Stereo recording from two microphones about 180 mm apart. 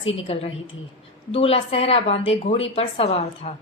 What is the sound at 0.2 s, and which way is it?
A woman's voice, 35° left (ahead or behind).